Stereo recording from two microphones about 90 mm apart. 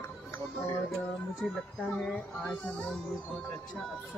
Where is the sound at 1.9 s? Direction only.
10° left (ahead or behind).